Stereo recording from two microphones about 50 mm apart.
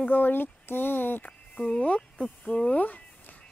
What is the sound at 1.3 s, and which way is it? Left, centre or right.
Speech, left.